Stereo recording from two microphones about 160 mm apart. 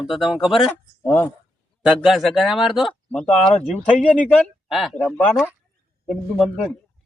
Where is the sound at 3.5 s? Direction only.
45° left (ahead or behind).